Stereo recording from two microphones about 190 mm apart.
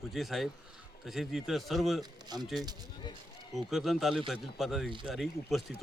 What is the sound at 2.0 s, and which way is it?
Speech, 20° right (ahead or behind).